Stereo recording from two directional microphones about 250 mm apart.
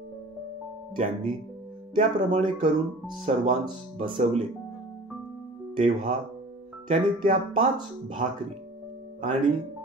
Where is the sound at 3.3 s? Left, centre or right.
Right.